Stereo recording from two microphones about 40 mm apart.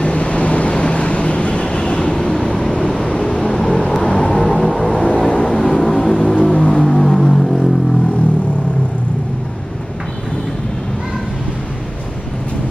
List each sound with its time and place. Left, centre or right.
0.0 s vehicle: left; by 4.9 s centre
4.9 s vehicle: left
6.2 s music: centre
6.5 s music: left
6.8 s a sound: centre